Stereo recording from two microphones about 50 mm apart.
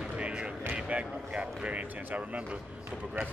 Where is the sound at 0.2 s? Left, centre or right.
Right.